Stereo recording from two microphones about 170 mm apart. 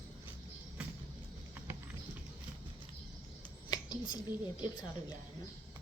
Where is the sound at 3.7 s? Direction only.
25° left (ahead or behind).